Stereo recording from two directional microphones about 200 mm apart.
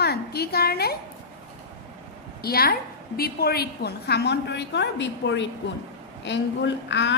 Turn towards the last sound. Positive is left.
turn(degrees=60)  # may be behind; listen again after turning